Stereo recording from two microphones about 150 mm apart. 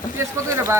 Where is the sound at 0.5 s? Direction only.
20° right (ahead or behind).